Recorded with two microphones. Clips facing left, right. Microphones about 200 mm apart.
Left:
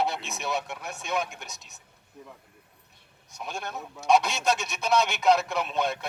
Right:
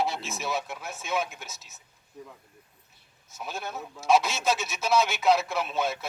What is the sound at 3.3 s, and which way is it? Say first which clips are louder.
A man's voice: even; centre (ahead or behind).